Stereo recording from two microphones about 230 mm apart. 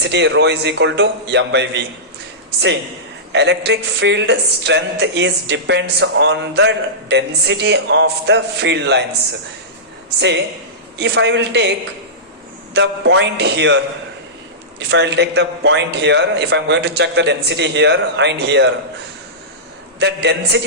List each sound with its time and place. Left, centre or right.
0.0 s speech: right
3.3 s speech: right
10.2 s speech: right
12.7 s speech: right
14.8 s speech: right
20.0 s speech: right